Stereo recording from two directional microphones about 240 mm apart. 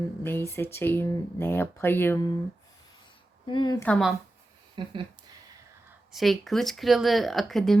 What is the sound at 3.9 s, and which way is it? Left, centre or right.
Speech, centre.